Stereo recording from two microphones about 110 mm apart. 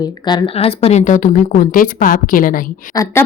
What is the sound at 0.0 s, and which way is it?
Speech, 40° left (ahead or behind).